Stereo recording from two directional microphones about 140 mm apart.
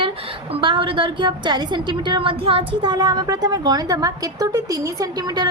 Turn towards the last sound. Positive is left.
turn(degrees=-30)  # may be behind; listen again after turning